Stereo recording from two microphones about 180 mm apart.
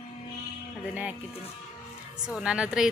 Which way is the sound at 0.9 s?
5° right (ahead or behind).